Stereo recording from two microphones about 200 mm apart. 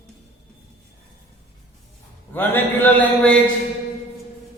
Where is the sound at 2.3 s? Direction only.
10° left (ahead or behind).